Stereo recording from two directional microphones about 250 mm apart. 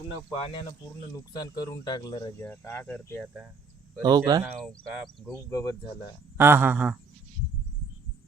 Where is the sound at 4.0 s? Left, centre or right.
Centre.